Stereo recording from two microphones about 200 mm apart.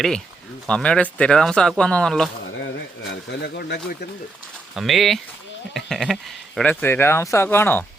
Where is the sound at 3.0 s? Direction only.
60° left (ahead or behind).